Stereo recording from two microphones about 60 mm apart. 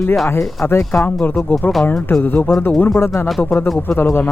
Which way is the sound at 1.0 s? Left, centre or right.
Left.